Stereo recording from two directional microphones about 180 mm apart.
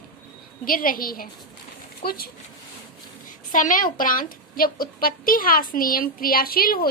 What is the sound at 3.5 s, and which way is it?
A child's voice, 50° left (ahead or behind).